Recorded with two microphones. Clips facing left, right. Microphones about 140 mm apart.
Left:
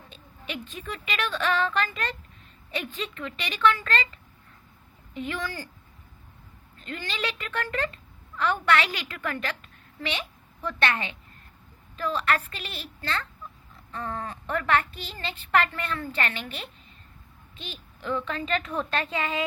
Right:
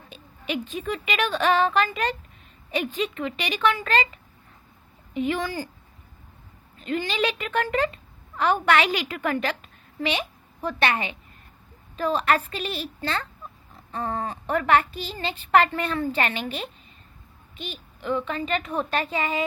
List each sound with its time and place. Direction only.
0.1 s a woman's voice: 15° right (ahead or behind)
6.7 s a woman's voice: 15° right (ahead or behind)
17.6 s a woman's voice: 5° right (ahead or behind)